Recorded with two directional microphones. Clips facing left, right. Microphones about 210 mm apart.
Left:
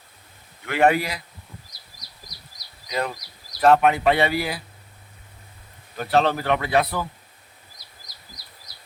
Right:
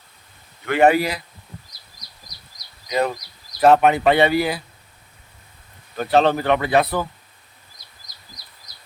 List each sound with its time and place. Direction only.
0.7 s speech: centre (ahead or behind)
3.6 s speech: centre (ahead or behind)
6.1 s speech: centre (ahead or behind)